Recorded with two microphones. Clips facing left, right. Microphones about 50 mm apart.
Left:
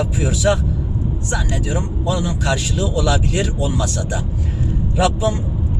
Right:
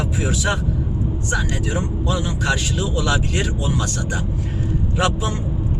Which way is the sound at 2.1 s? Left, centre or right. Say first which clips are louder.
Left 2 dB; centre.